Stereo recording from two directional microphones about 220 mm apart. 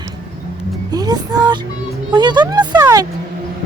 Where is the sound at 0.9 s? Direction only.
15° right (ahead or behind).